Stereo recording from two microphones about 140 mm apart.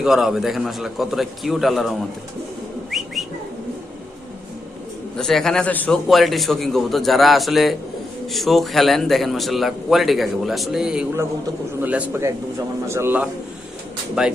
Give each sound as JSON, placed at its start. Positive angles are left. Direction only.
{"t": 0.0, "sound": "a man's voice", "side_deg": -5}
{"t": 2.9, "sound": "whistling", "side_deg": 0}
{"t": 5.1, "sound": "a man's voice", "side_deg": 0}
{"t": 14.2, "sound": "a man's voice", "side_deg": -5}